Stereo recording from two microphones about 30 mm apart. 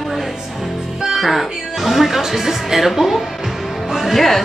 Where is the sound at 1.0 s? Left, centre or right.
Centre.